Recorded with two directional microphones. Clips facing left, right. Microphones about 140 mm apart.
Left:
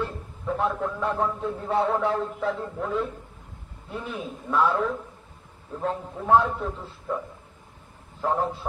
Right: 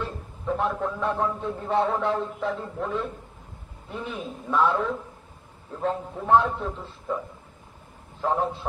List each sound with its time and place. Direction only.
0.0 s a man's voice: centre (ahead or behind)
8.2 s a man's voice: centre (ahead or behind)